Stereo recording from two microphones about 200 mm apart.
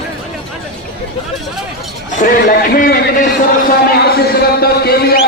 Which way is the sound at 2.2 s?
40° left (ahead or behind).